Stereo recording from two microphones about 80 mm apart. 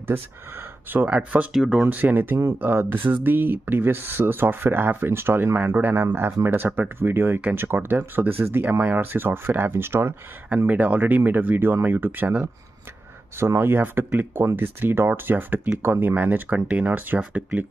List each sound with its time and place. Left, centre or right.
0.9 s speech: centre
1.5 s speech: centre
1.8 s speech: right
10.7 s speech: centre
13.4 s speech: right